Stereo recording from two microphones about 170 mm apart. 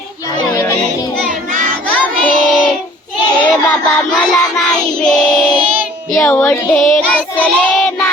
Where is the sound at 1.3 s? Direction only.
50° right (ahead or behind).